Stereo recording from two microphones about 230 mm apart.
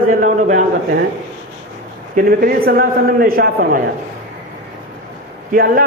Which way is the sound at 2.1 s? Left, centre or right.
Right.